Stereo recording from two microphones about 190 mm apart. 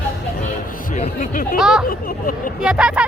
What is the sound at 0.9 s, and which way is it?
Speech, 45° left (ahead or behind).